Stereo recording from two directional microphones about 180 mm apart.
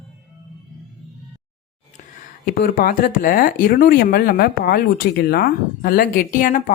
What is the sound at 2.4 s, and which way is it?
Speech, 50° left (ahead or behind).